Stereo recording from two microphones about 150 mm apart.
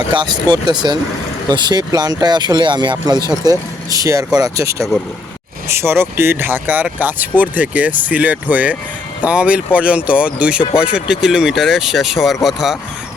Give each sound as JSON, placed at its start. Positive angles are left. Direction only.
{"t": 0.1, "sound": "speech", "side_deg": -30}